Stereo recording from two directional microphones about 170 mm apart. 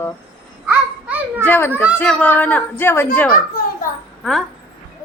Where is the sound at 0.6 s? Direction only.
10° right (ahead or behind).